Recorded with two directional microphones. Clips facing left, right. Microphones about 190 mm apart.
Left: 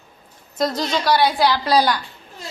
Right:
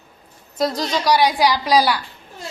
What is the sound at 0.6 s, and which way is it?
A woman's voice, 10° right (ahead or behind).